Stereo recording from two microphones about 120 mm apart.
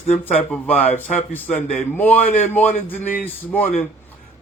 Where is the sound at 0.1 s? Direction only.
15° left (ahead or behind).